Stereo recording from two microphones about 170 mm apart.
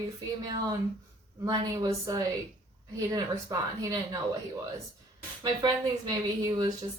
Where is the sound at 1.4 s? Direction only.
20° right (ahead or behind).